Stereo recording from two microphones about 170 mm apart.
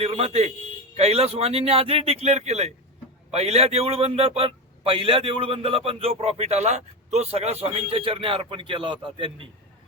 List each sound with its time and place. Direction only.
0.0 s a man's voice: 35° right (ahead or behind)